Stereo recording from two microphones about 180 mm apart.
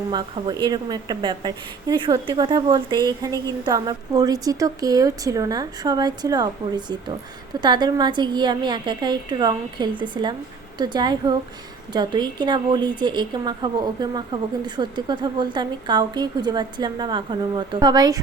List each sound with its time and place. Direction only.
0.1 s a woman's voice: 25° right (ahead or behind)